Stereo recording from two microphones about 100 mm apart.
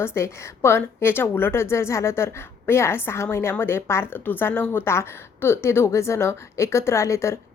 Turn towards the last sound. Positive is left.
turn(degrees=30)  # may be behind; listen again after turning